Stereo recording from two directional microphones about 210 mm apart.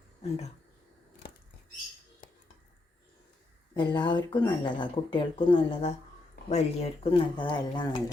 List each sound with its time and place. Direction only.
0.2 s speech: 30° left (ahead or behind)
3.8 s speech: 20° left (ahead or behind)